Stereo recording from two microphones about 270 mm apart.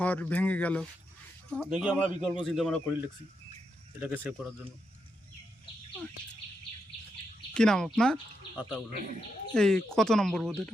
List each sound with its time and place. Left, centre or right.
0.0 s speech: centre
4.0 s speech: centre
7.5 s speech: centre